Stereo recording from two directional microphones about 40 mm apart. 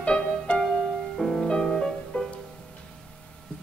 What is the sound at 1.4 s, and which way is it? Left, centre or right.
Music, centre.